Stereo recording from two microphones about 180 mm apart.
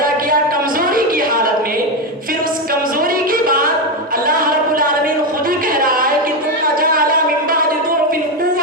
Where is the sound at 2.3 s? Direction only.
50° right (ahead or behind).